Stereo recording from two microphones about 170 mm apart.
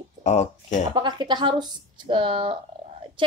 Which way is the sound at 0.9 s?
25° right (ahead or behind).